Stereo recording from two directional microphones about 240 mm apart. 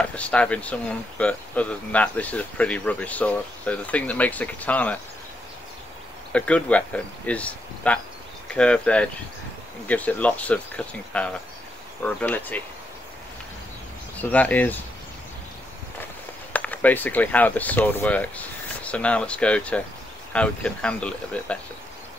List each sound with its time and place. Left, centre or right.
0.0 s speech: centre
6.3 s speech: centre
14.1 s speech: centre
16.5 s speech: centre